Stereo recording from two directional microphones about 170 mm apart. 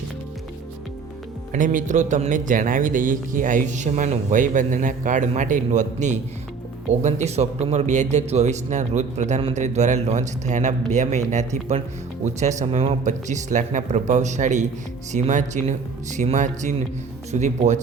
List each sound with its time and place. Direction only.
1.5 s speech: 50° right (ahead or behind)